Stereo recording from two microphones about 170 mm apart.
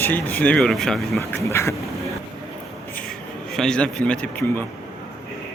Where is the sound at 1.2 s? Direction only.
15° left (ahead or behind).